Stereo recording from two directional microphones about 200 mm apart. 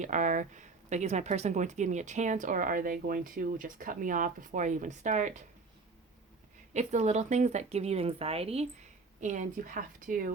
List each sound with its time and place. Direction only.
0.0 s speech: 40° right (ahead or behind)
6.7 s speech: 35° right (ahead or behind)